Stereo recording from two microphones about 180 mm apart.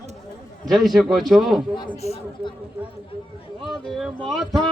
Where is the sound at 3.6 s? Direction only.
Centre (ahead or behind).